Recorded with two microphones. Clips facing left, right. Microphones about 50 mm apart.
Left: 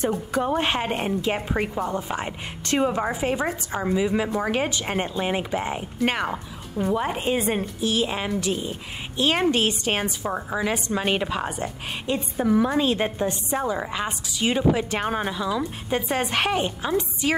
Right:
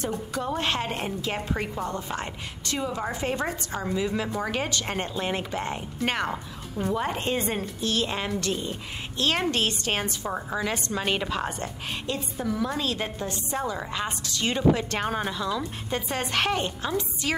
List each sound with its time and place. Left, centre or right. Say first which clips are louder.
0.3 s a woman's voice: left 4 dB; left
2.6 s a woman's voice: left 8 dB; left
3.1 s a woman's voice: left 4 dB; centre
12.1 s a woman's voice: left 8 dB; left